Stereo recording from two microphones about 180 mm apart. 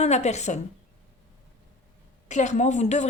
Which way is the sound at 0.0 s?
40° left (ahead or behind).